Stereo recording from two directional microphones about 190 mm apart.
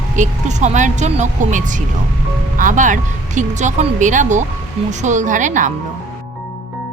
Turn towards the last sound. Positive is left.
turn(degrees=-40)  # may be behind; listen again after turning